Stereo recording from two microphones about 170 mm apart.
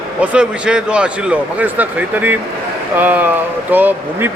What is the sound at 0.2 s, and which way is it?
A man's voice, 5° right (ahead or behind).